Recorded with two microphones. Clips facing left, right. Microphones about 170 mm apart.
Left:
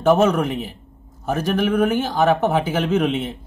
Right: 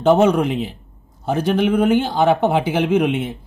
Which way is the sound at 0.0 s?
15° right (ahead or behind).